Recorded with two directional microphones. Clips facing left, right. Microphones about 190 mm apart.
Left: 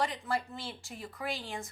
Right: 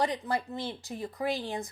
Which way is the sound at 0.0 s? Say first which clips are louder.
Right 3 dB; 20° right (ahead or behind).